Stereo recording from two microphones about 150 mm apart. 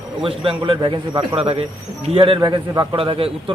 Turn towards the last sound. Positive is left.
turn(degrees=-35)  # may be behind; listen again after turning